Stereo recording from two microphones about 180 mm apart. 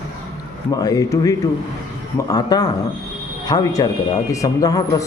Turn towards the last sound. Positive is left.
turn(degrees=20)  # may be behind; listen again after turning